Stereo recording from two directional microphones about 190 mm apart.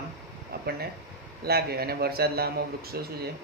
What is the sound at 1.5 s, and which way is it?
Speech, 55° right (ahead or behind).